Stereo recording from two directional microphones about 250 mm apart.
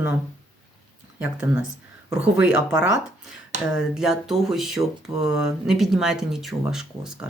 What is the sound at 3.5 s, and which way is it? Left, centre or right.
Finger snapping, right.